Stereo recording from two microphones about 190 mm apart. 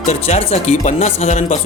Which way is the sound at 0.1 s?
35° left (ahead or behind).